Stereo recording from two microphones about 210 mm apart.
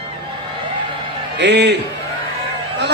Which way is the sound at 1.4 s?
55° right (ahead or behind).